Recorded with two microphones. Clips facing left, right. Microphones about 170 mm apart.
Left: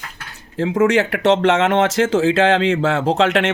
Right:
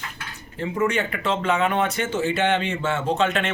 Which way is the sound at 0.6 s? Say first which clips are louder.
Left 8 dB; 90° left.